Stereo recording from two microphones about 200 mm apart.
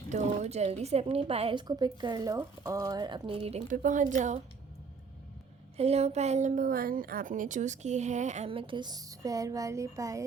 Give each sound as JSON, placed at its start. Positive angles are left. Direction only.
{"t": 0.1, "sound": "a woman's voice", "side_deg": -35}
{"t": 5.7, "sound": "a woman's voice", "side_deg": -30}